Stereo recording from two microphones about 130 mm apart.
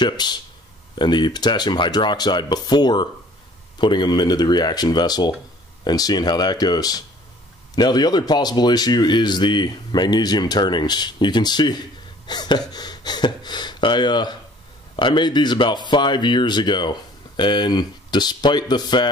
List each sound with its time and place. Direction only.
0.0 s a man's voice: 35° left (ahead or behind)
12.3 s a sound: 35° left (ahead or behind)
15.0 s a man's voice: 35° left (ahead or behind)